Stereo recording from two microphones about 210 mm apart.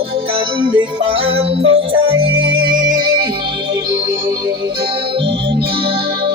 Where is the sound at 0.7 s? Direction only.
25° right (ahead or behind).